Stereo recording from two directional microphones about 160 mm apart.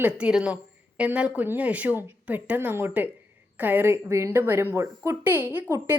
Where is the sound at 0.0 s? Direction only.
5° right (ahead or behind).